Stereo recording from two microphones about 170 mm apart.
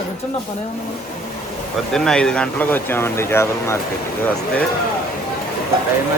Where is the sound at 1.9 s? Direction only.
5° left (ahead or behind).